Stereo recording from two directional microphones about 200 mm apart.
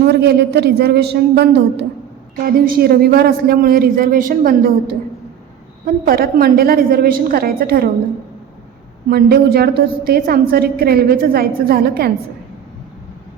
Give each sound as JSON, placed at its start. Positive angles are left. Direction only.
{"t": 0.0, "sound": "a man's voice", "side_deg": -55}
{"t": 9.0, "sound": "a woman's voice", "side_deg": -50}